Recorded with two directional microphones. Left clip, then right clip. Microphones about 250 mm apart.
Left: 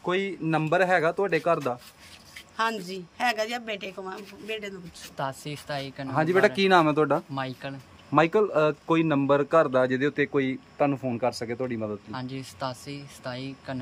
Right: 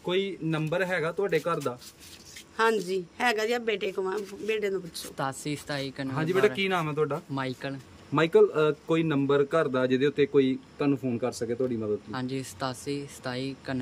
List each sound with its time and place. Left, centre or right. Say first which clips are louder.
0.0 s a man's voice: left 1 dB; centre
2.5 s speech: right 3 dB; centre
5.1 s speech: even; centre
6.1 s speech: left 4 dB; left
7.3 s speech: even; centre
8.1 s a man's voice: even; centre
12.1 s speech: right 2 dB; centre